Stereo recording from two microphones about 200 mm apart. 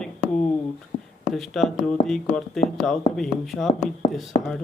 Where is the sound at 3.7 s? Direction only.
30° left (ahead or behind).